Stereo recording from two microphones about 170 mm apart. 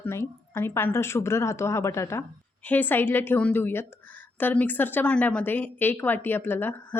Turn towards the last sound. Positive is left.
turn(degrees=10)  # may be behind; listen again after turning